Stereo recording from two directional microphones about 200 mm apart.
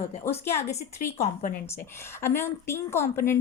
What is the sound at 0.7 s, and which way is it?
Speech, 35° left (ahead or behind).